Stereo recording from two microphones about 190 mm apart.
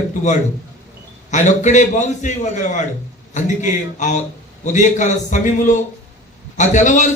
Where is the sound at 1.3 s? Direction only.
40° left (ahead or behind).